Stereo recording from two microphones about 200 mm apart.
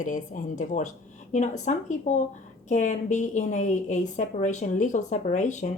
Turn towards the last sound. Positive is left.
turn(degrees=35)  # may be behind; listen again after turning